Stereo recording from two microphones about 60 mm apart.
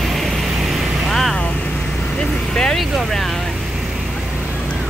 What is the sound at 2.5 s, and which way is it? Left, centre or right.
Vehicle, centre.